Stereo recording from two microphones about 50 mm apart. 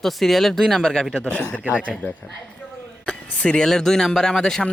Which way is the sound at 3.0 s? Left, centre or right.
Left.